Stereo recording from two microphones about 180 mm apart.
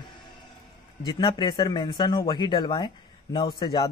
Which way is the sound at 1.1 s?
25° left (ahead or behind).